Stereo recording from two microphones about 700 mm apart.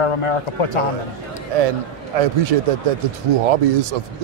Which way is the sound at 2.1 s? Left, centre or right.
Right.